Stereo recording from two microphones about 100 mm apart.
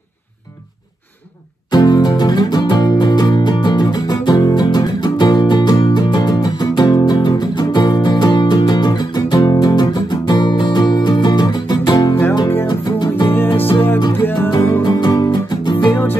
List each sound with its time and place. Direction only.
1.7 s music: 45° left (ahead or behind)
13.3 s music: 20° left (ahead or behind)
14.8 s music: 45° left (ahead or behind)
15.9 s music: 20° left (ahead or behind)